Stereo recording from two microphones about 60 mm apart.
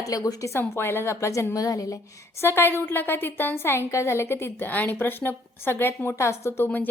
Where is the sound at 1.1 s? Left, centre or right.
Left.